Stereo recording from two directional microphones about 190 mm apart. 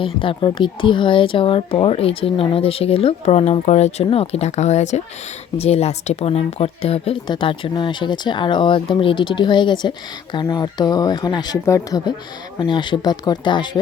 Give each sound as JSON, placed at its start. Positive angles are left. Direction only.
{"t": 0.0, "sound": "speech", "side_deg": 25}